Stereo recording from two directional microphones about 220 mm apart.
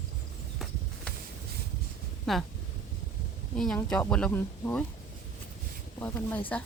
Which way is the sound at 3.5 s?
5° left (ahead or behind).